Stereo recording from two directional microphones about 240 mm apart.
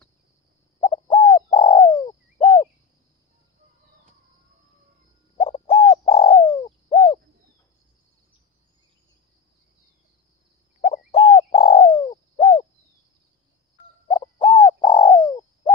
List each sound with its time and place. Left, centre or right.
0.7 s bird: left
5.4 s bird: left
10.8 s bird: left
14.0 s bird: centre